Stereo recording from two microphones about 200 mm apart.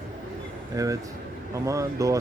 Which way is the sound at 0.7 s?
15° right (ahead or behind).